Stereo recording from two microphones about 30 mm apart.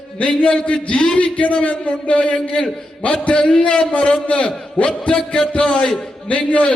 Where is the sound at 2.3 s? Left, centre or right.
Left.